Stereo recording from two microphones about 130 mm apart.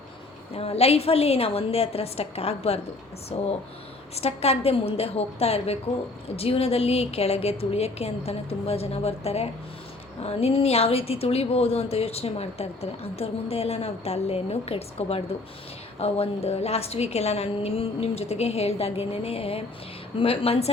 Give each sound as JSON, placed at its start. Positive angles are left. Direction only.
{"t": 0.5, "sound": "a woman's voice", "side_deg": 50}